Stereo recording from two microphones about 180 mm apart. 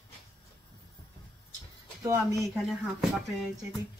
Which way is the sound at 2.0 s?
15° right (ahead or behind).